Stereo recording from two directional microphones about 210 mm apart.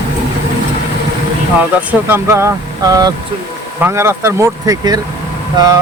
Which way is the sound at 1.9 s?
10° right (ahead or behind).